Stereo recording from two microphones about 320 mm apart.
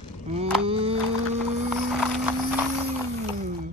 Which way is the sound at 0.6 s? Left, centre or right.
Centre.